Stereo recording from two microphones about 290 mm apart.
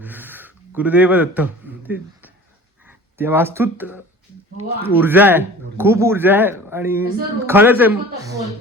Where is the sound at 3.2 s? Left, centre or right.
Centre.